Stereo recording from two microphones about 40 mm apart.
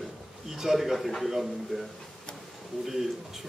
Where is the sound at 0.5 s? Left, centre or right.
Centre.